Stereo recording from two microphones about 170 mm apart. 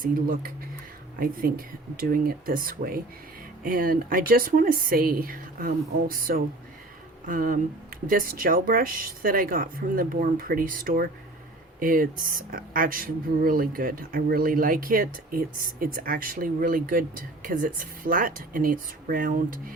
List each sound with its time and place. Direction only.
0.0 s speech: 55° right (ahead or behind)